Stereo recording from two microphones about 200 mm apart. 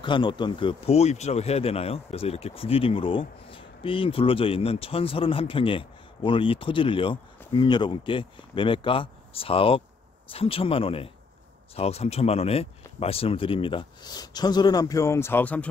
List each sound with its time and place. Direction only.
0.0 s speech: 25° left (ahead or behind)